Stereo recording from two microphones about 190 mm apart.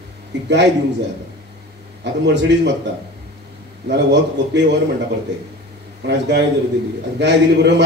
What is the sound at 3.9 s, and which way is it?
Speech, 65° right (ahead or behind).